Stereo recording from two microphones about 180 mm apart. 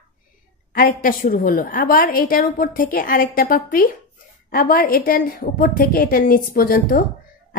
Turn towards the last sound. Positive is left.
turn(degrees=55)  # may be behind; listen again after turning